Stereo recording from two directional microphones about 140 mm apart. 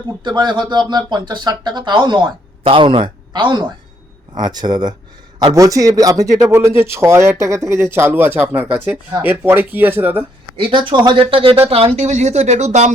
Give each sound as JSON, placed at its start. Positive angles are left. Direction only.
{"t": 0.3, "sound": "speech", "side_deg": -30}
{"t": 10.6, "sound": "speech", "side_deg": -35}